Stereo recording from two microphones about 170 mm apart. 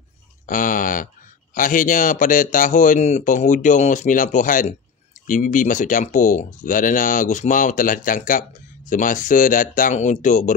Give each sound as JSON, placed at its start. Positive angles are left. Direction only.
{"t": 0.5, "sound": "speech", "side_deg": 55}